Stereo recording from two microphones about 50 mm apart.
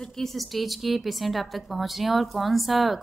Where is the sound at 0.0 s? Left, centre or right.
Centre.